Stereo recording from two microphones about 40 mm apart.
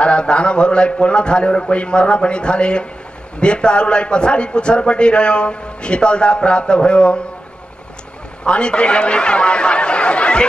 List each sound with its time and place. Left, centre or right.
0.0 s a man's voice: left
8.5 s speech: left